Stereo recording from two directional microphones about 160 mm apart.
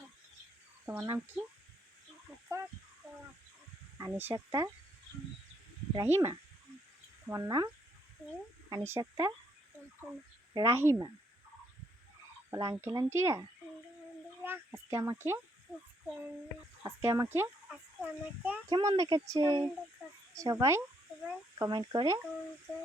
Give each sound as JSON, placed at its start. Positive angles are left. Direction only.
{"t": 0.9, "sound": "speech", "side_deg": -5}
{"t": 2.5, "sound": "speech", "side_deg": -15}
{"t": 3.9, "sound": "speech", "side_deg": -15}
{"t": 5.9, "sound": "speech", "side_deg": -20}
{"t": 8.7, "sound": "speech", "side_deg": -20}
{"t": 10.5, "sound": "speech", "side_deg": -20}
{"t": 12.5, "sound": "speech", "side_deg": -20}
{"t": 14.4, "sound": "speech", "side_deg": -15}
{"t": 16.8, "sound": "speech", "side_deg": -20}
{"t": 18.7, "sound": "speech", "side_deg": -25}